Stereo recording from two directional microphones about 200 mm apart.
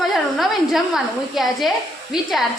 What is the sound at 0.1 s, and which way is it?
A woman's voice, centre (ahead or behind).